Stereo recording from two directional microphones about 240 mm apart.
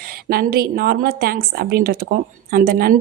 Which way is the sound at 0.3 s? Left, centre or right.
Right.